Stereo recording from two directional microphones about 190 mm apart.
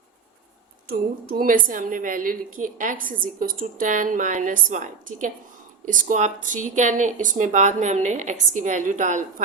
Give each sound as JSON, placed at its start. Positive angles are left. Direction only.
{"t": 0.9, "sound": "a woman's voice", "side_deg": -50}